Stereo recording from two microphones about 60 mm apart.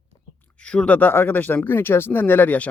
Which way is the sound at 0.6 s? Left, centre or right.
Centre.